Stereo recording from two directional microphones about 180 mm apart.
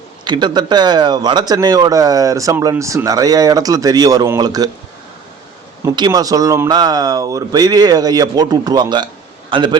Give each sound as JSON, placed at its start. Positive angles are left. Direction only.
{"t": 0.3, "sound": "speech", "side_deg": -25}
{"t": 5.8, "sound": "a man's voice", "side_deg": -20}